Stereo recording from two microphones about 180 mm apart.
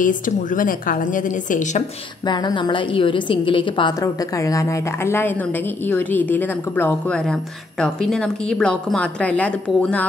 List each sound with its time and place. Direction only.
0.0 s a woman's voice: 45° left (ahead or behind)
2.2 s a woman's voice: 25° left (ahead or behind); by 10.0 s 5° left (ahead or behind)